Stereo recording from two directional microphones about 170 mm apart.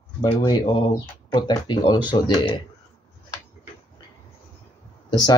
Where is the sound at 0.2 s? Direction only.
25° left (ahead or behind).